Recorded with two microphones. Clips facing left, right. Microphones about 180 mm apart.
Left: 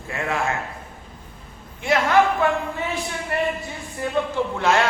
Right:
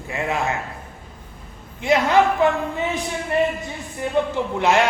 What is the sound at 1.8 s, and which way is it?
A man's voice, 20° right (ahead or behind).